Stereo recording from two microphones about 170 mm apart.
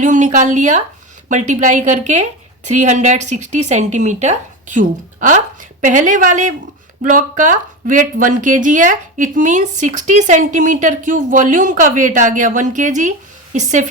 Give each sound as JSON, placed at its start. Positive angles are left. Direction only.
{"t": 0.0, "sound": "speech", "side_deg": -50}